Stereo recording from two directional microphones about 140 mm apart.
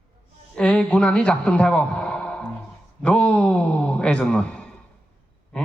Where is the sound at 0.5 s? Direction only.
5° left (ahead or behind).